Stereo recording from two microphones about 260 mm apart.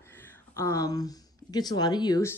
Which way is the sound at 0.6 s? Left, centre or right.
Centre.